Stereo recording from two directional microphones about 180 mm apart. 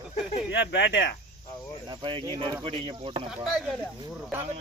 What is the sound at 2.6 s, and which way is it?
Speech, 30° right (ahead or behind).